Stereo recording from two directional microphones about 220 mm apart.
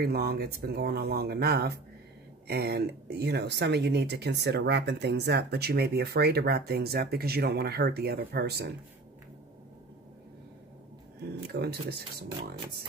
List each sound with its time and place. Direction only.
0.0 s speech: 45° right (ahead or behind)
11.4 s speech: 45° right (ahead or behind)